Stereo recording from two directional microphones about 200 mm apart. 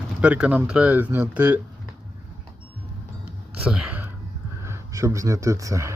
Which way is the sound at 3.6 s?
5° right (ahead or behind).